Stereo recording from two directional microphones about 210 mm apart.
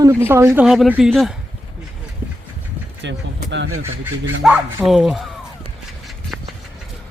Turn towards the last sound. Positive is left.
turn(degrees=0)  # may be behind; listen again after turning